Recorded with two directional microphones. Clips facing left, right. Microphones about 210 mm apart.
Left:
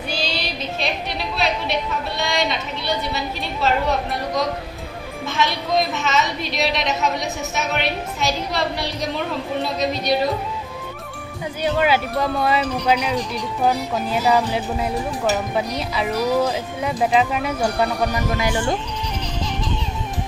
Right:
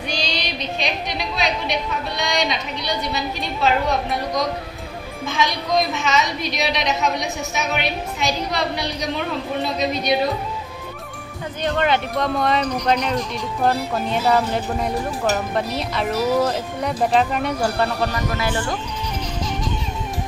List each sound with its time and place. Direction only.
0.1 s speech: 5° left (ahead or behind)
11.6 s speech: 5° left (ahead or behind)
18.0 s speech: 15° left (ahead or behind)